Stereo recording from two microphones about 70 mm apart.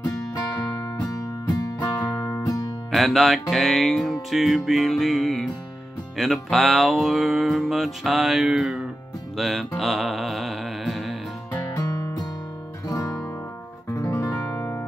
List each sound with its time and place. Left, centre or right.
0.0 s music: left
2.9 s music: centre
11.7 s music: left
12.8 s guitar: left
13.8 s music: left